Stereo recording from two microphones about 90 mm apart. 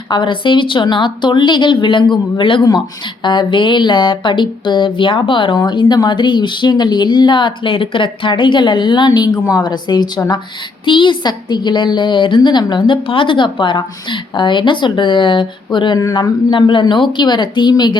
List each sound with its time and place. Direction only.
0.1 s a woman's voice: 60° left (ahead or behind)
2.4 s speech: 75° left (ahead or behind)
3.2 s a woman's voice: 60° left (ahead or behind)
5.5 s a woman's voice: 55° left (ahead or behind)
10.8 s a woman's voice: 65° left (ahead or behind)